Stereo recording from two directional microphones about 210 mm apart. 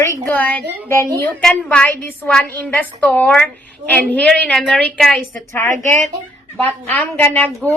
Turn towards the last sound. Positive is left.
turn(degrees=10)  # may be behind; listen again after turning